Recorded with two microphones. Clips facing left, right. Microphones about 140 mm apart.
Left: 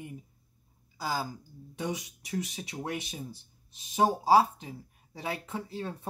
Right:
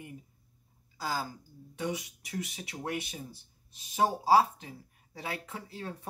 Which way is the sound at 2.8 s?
20° left (ahead or behind).